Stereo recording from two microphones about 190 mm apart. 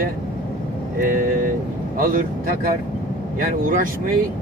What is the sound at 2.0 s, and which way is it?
Speech, 50° right (ahead or behind).